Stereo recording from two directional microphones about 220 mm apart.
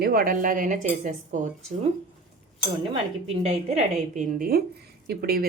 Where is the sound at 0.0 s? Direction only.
40° right (ahead or behind).